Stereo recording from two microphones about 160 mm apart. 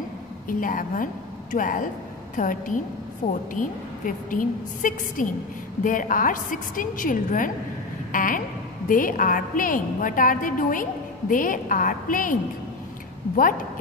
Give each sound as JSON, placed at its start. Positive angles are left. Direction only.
{"t": 0.5, "sound": "a woman's voice", "side_deg": 60}
{"t": 3.2, "sound": "speech", "side_deg": 40}
{"t": 3.5, "sound": "a woman's voice", "side_deg": 55}